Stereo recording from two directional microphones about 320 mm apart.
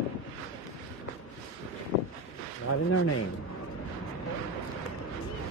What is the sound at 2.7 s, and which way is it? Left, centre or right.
Speech, left.